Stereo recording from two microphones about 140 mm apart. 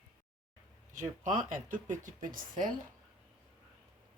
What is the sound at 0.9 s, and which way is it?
Speech, 65° right (ahead or behind).